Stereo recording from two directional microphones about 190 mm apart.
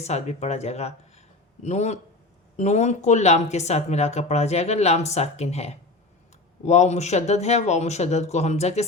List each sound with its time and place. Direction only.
0.0 s speech: 35° left (ahead or behind)